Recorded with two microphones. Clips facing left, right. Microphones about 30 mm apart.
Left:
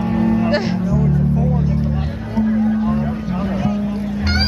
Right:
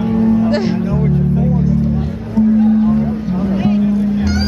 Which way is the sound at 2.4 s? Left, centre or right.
Centre.